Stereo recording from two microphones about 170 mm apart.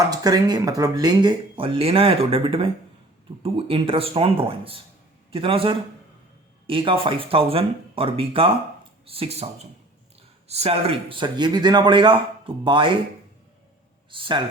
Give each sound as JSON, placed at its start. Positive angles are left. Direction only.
{"t": 0.1, "sound": "speech", "side_deg": -20}
{"t": 10.5, "sound": "speech", "side_deg": -35}
{"t": 14.1, "sound": "speech", "side_deg": -30}